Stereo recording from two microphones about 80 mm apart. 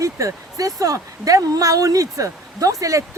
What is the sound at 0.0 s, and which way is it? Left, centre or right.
Speech, right.